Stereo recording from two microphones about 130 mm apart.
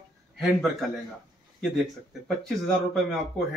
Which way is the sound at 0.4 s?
Centre (ahead or behind).